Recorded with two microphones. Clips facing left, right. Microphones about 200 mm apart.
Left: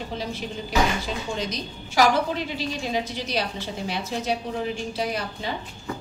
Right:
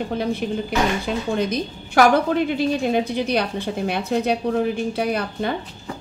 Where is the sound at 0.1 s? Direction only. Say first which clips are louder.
Right 8 dB; 60° right (ahead or behind).